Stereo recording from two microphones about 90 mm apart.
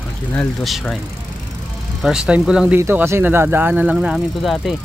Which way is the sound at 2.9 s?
25° right (ahead or behind).